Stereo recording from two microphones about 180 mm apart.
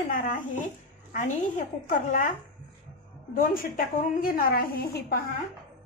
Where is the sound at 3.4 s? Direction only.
50° left (ahead or behind).